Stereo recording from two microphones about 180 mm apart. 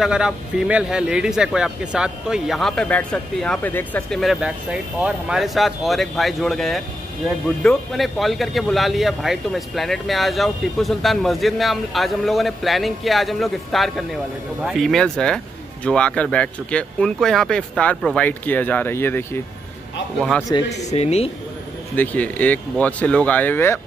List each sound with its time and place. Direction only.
0.0 s speech: 5° right (ahead or behind)
20.7 s speech: 35° left (ahead or behind)
21.9 s speech: 10° left (ahead or behind)